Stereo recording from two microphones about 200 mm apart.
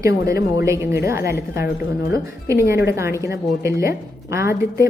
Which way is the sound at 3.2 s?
15° right (ahead or behind).